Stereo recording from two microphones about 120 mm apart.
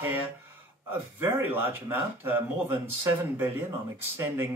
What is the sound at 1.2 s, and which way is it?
Speech, 15° right (ahead or behind).